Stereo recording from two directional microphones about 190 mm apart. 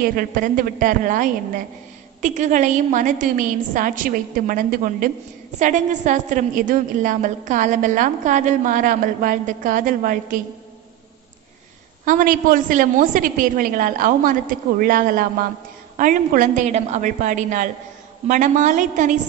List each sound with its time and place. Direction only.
0.0 s a woman's voice: 50° right (ahead or behind)
12.0 s a woman's voice: 45° right (ahead or behind)